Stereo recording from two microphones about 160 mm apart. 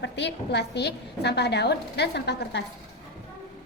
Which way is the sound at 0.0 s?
90° left.